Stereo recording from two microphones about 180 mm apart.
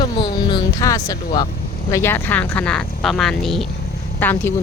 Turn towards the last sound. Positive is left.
turn(degrees=10)  # may be behind; listen again after turning